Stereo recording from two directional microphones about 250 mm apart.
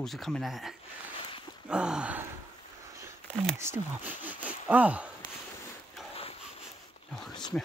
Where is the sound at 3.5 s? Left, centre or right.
Centre.